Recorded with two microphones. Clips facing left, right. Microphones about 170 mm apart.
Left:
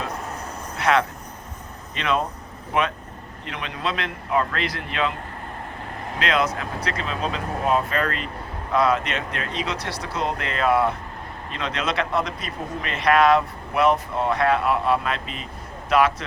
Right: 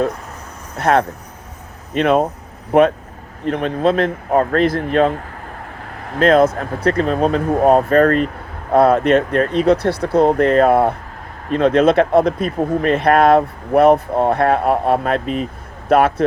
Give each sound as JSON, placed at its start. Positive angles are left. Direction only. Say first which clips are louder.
{"t": 0.8, "sound": "speech", "louder": "right 5 dB", "side_deg": -50}
{"t": 6.1, "sound": "speech", "louder": "right 11 dB", "side_deg": -50}